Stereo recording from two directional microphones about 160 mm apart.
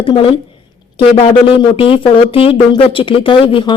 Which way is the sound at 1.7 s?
35° left (ahead or behind).